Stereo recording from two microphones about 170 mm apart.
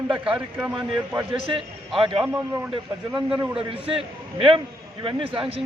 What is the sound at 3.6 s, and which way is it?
A man's voice, 30° right (ahead or behind).